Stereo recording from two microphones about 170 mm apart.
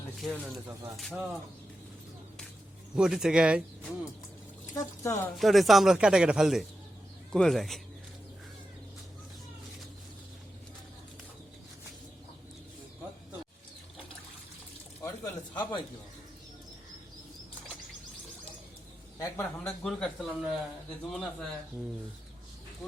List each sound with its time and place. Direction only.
0.2 s speech: centre (ahead or behind)
2.9 s speech: 5° right (ahead or behind)
4.7 s speech: 15° left (ahead or behind)
5.4 s speech: centre (ahead or behind)
15.0 s speech: 25° left (ahead or behind)
19.2 s speech: 10° left (ahead or behind)